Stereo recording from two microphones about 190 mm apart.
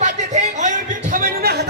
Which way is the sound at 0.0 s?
40° right (ahead or behind).